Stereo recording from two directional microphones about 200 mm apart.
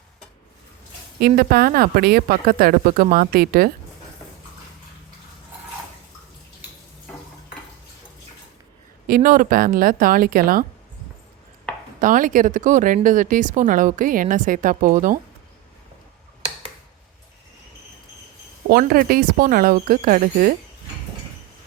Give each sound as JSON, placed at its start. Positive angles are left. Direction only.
{"t": 1.4, "sound": "speech", "side_deg": -45}
{"t": 9.0, "sound": "speech", "side_deg": -45}
{"t": 11.9, "sound": "speech", "side_deg": -40}
{"t": 18.7, "sound": "speech", "side_deg": -45}